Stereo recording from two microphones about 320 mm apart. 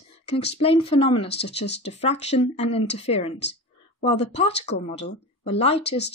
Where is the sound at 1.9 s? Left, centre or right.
Centre.